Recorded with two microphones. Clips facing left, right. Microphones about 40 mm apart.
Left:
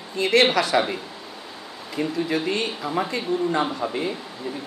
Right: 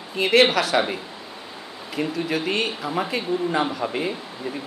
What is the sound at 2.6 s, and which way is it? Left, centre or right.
A woman's voice, centre.